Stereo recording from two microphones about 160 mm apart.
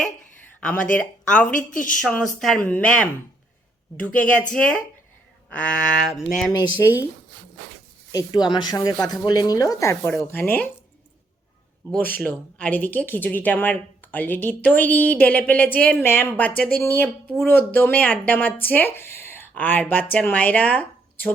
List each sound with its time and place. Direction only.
0.6 s speech: 10° left (ahead or behind)
6.5 s speech: 25° left (ahead or behind)
8.1 s speech: 25° left (ahead or behind)
12.2 s speech: 10° left (ahead or behind)